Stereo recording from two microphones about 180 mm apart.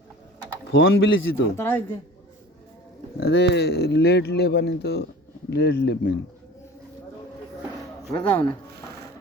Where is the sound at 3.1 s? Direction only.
65° left (ahead or behind).